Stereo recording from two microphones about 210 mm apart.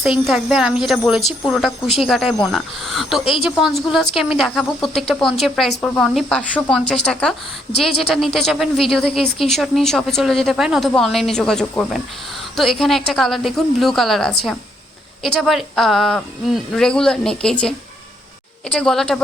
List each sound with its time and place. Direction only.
0.0 s a woman's voice: centre (ahead or behind)